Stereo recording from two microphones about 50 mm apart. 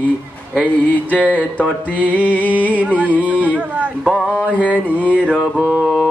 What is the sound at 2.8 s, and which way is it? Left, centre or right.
Carnatic music, right.